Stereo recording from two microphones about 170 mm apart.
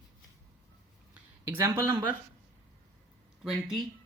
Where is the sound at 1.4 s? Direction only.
10° right (ahead or behind).